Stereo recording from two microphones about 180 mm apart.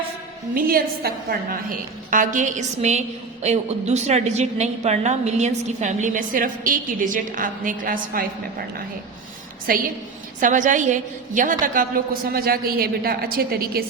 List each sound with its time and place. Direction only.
0.5 s a woman's voice: 55° right (ahead or behind)
10.4 s a woman's voice: 45° right (ahead or behind)